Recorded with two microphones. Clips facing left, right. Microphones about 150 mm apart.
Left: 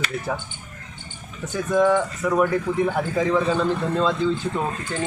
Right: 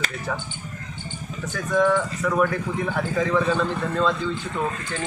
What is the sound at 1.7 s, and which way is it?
Speech, 25° left (ahead or behind).